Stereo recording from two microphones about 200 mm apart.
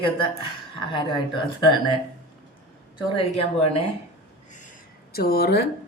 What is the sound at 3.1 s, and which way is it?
Speech, 30° left (ahead or behind).